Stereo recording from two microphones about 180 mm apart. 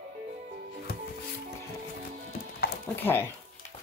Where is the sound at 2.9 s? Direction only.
10° left (ahead or behind).